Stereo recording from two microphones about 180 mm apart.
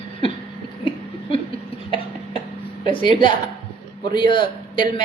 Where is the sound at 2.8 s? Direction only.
30° left (ahead or behind).